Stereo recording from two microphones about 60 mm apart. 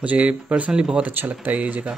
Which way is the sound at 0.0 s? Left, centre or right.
Right.